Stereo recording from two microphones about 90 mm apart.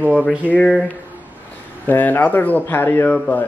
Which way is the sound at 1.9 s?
20° left (ahead or behind).